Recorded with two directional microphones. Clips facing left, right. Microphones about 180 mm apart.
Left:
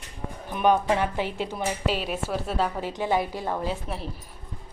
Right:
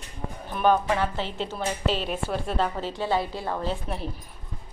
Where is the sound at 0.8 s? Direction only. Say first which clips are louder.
Left 2 dB; 20° left (ahead or behind).